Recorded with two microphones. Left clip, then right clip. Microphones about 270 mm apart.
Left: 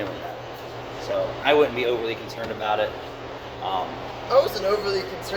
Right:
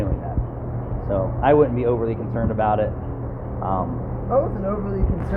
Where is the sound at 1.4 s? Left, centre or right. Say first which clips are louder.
Right 3 dB; left.